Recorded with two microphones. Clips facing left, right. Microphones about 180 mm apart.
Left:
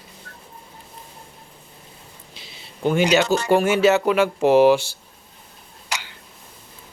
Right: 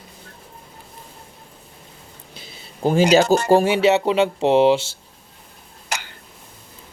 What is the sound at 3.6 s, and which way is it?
Speech, 25° right (ahead or behind).